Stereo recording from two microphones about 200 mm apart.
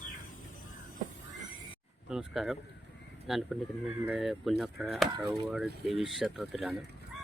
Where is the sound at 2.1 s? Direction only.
Centre (ahead or behind).